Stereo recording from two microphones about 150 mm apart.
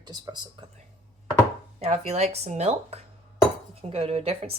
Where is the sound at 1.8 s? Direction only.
45° right (ahead or behind).